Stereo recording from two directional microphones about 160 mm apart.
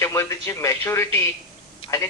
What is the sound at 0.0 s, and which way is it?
Speech, 15° left (ahead or behind).